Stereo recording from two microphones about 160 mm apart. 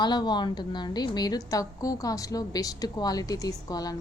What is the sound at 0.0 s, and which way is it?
A woman's voice, 25° left (ahead or behind).